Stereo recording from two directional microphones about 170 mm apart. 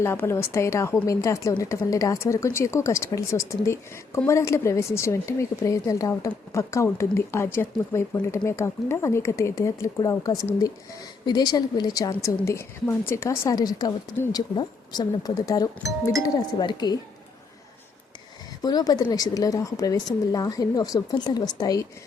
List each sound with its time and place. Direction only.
0.0 s a woman's voice: 15° left (ahead or behind)
18.6 s a woman's voice: 25° left (ahead or behind)